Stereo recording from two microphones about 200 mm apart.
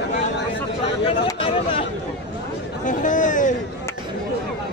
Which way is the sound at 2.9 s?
40° left (ahead or behind).